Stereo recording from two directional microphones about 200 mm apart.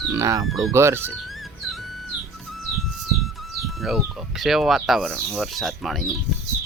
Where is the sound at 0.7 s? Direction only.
10° right (ahead or behind).